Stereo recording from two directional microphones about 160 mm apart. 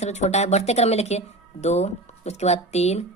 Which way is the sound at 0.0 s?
45° left (ahead or behind).